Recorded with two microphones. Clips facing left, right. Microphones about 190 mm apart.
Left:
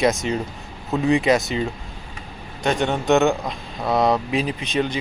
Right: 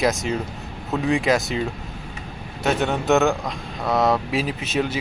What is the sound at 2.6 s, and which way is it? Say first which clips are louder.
A man's voice: left 1 dB; 5° right (ahead or behind).